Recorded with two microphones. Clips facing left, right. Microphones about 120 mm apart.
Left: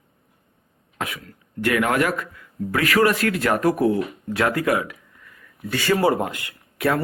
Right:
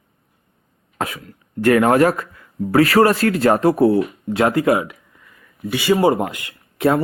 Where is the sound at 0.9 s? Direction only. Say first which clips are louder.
Right 5 dB; 35° right (ahead or behind).